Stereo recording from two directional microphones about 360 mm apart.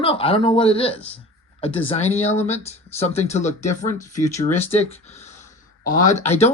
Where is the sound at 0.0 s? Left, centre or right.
Centre.